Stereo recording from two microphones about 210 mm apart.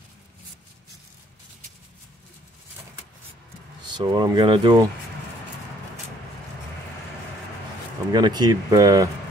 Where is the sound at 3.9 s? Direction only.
20° right (ahead or behind).